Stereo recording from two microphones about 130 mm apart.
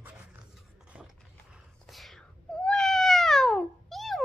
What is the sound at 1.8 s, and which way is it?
Cat, centre (ahead or behind).